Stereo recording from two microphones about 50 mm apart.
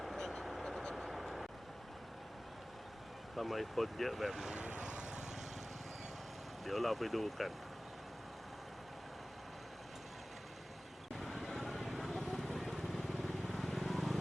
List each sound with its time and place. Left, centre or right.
0.0 s vehicle: centre
3.3 s speech: centre
4.4 s speech: right
6.7 s speech: centre
11.2 s vehicle: centre